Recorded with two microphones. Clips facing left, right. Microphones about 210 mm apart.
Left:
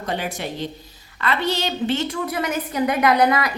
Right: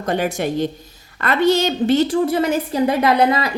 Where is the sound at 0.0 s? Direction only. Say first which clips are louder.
Right 7 dB; 45° right (ahead or behind).